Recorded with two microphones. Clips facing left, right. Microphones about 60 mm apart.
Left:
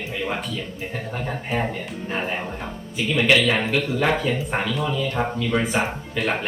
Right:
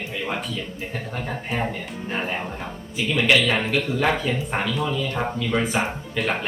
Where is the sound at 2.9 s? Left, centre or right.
Centre.